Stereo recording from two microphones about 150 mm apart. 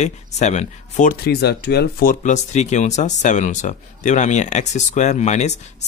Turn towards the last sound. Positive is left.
turn(degrees=50)  # may be behind; listen again after turning